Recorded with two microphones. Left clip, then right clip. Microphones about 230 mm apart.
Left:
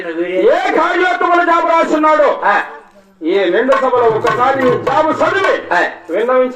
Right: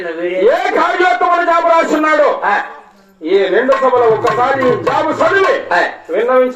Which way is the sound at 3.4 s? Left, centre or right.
Centre.